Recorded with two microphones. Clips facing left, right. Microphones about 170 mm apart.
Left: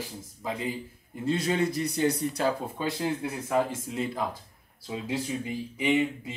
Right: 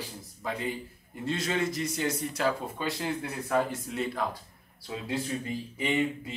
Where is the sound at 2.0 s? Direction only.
30° left (ahead or behind).